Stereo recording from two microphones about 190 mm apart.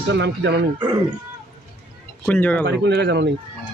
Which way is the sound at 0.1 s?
70° right (ahead or behind).